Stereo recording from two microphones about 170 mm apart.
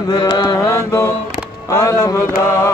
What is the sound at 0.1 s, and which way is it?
Mantra, 25° left (ahead or behind).